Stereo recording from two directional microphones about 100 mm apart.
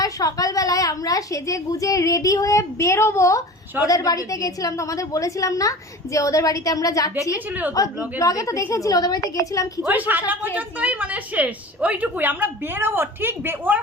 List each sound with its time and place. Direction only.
0.0 s a woman's voice: 35° left (ahead or behind)
7.3 s a woman's voice: 15° right (ahead or behind)
8.2 s a woman's voice: 35° left (ahead or behind)
9.8 s a woman's voice: 15° right (ahead or behind)